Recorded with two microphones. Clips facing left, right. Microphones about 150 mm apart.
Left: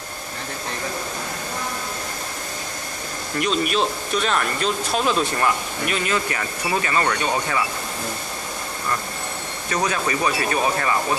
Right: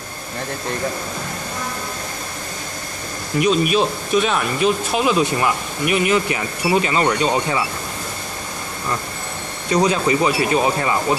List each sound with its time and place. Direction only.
3.3 s speech: 10° right (ahead or behind)
9.7 s speech: 20° right (ahead or behind)